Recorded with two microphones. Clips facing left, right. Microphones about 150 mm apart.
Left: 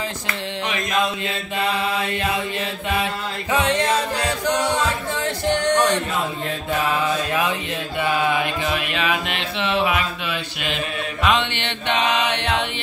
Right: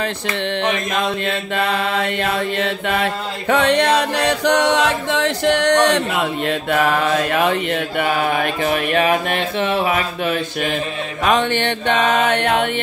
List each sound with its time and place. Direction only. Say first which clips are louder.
1.2 s mantra: right 4 dB; 60° right (ahead or behind)
2.6 s chant: right 4 dB; 65° right (ahead or behind); by 10.8 s 45° right (ahead or behind)
11.2 s music: right 5 dB; 45° right (ahead or behind)